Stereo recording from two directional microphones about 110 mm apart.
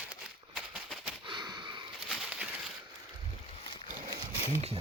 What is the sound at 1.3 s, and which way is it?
Sniff, 40° right (ahead or behind).